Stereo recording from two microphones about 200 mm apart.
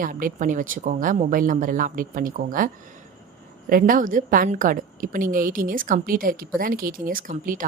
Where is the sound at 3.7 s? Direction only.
45° right (ahead or behind).